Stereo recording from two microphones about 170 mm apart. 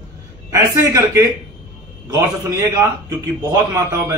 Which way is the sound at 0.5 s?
15° right (ahead or behind).